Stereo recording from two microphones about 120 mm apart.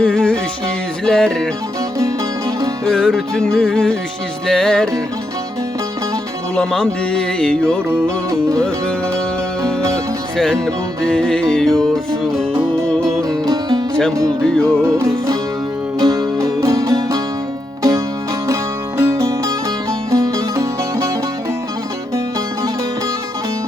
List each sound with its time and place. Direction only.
0.0 s music: 5° left (ahead or behind)
2.8 s music: 5° left (ahead or behind)
6.6 s music: 10° left (ahead or behind)
10.3 s music: 5° left (ahead or behind)
13.4 s music: 35° right (ahead or behind)
14.4 s music: 5° left (ahead or behind)
14.8 s music: 25° right (ahead or behind)
18.9 s music: 25° right (ahead or behind)